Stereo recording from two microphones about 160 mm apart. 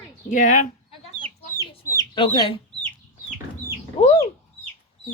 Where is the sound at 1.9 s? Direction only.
25° left (ahead or behind).